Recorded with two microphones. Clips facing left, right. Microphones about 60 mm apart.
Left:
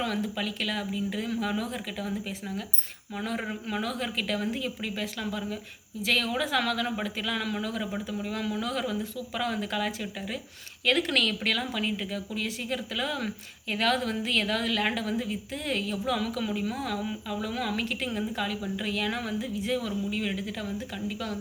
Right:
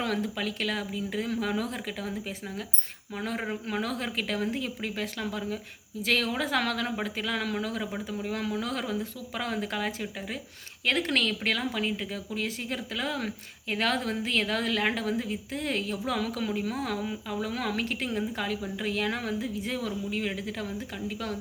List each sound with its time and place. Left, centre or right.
0.0 s speech: right